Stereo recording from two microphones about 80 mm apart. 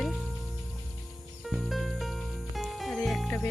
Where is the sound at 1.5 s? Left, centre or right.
Centre.